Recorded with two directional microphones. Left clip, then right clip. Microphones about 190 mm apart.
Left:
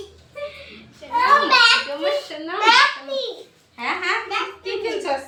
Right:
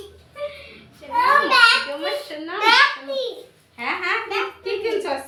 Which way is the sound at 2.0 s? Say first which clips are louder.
Left 3 dB; 15° left (ahead or behind).